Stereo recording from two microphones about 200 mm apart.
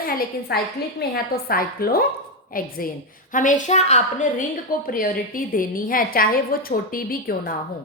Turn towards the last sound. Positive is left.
turn(degrees=45)  # may be behind; listen again after turning